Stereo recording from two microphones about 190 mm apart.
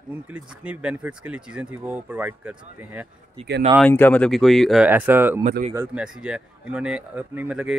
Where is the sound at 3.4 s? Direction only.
30° right (ahead or behind).